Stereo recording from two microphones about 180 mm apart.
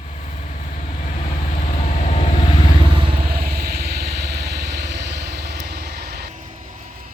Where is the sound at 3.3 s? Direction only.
55° right (ahead or behind).